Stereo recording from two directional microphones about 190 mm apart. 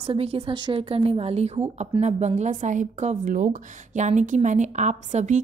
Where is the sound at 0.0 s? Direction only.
30° right (ahead or behind).